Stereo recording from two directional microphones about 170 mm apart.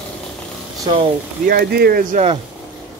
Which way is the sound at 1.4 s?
65° right (ahead or behind).